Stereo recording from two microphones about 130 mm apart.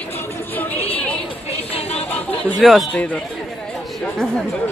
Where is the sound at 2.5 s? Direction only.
Centre (ahead or behind).